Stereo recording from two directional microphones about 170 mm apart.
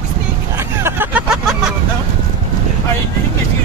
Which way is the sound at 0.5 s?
15° right (ahead or behind).